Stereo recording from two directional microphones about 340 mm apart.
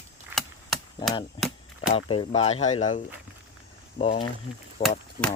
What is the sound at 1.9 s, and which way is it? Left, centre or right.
Speech, centre.